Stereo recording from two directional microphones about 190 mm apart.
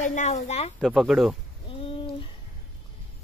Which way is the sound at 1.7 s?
30° left (ahead or behind).